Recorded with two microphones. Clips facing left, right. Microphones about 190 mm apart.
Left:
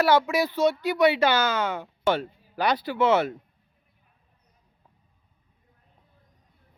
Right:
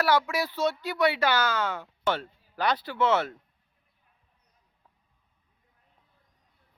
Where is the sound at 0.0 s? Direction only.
20° left (ahead or behind).